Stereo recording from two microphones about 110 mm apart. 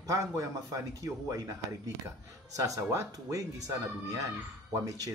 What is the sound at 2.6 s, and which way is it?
Speech, 30° right (ahead or behind).